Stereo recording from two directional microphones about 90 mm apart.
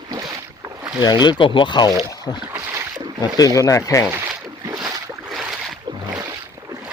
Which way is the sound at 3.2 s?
40° left (ahead or behind).